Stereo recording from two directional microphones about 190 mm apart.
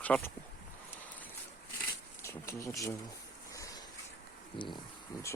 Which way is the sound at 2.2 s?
15° left (ahead or behind).